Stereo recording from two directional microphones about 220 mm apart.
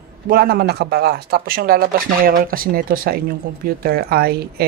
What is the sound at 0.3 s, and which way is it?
Speech, 45° right (ahead or behind).